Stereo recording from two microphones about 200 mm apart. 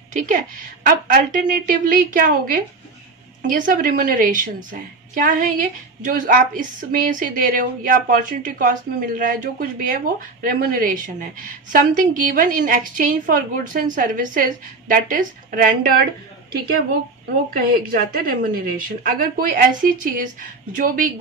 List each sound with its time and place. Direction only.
0.3 s a woman's voice: 40° right (ahead or behind)
17.5 s speech: 45° right (ahead or behind)